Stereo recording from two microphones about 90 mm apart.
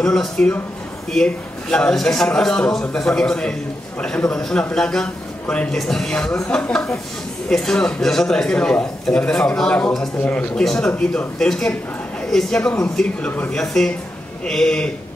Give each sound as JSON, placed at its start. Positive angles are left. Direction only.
{"t": 0.0, "sound": "a man's voice", "side_deg": 5}
{"t": 13.6, "sound": "a man's voice", "side_deg": 5}